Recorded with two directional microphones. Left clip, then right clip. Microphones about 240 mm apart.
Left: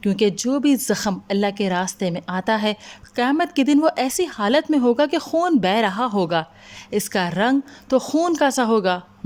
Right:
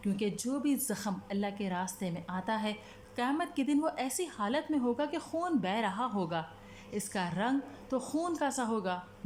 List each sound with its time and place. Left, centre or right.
0.0 s a woman's voice: left